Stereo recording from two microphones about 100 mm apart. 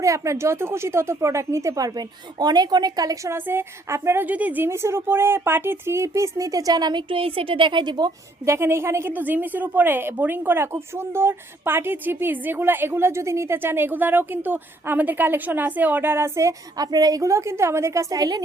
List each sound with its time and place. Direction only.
0.0 s speech: 30° right (ahead or behind)
3.3 s a woman's voice: 20° right (ahead or behind); by 8.1 s 45° right (ahead or behind)
8.4 s a woman's voice: 25° right (ahead or behind)